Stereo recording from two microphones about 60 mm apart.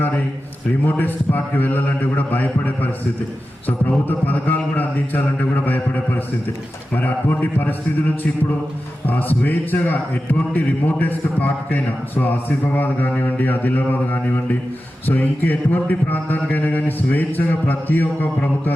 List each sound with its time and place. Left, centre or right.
0.9 s a man's voice: left